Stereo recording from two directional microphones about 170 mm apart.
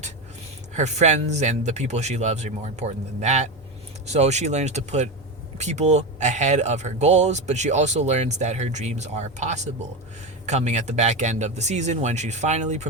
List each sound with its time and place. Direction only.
0.7 s speech: 45° right (ahead or behind)